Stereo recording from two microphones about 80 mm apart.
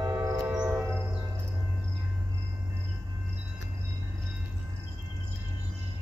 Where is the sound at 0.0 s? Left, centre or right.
Right.